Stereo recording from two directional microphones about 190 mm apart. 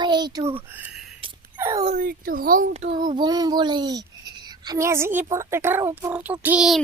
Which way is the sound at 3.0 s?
25° right (ahead or behind).